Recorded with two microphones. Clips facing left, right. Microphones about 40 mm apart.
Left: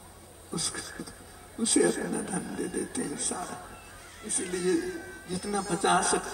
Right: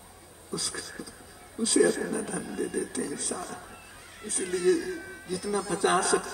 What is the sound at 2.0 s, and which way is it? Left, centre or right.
Speech, right.